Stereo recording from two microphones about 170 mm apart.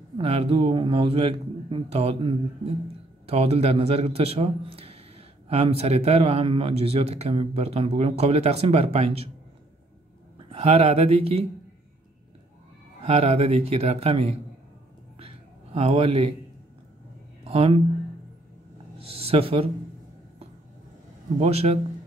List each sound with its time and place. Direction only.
0.2 s a man's voice: 35° right (ahead or behind)
10.5 s a man's voice: 40° right (ahead or behind)
13.0 s a man's voice: 35° right (ahead or behind)
15.1 s a sound: 35° right (ahead or behind)
17.5 s a man's voice: 35° right (ahead or behind)
18.9 s a man's voice: 35° right (ahead or behind)
21.4 s a man's voice: 40° right (ahead or behind)